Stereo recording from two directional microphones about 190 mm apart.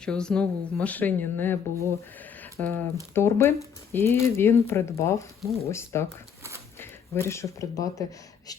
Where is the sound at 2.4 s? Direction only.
10° left (ahead or behind).